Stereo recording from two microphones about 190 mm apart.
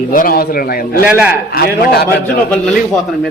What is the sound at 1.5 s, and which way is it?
Speech, 55° left (ahead or behind).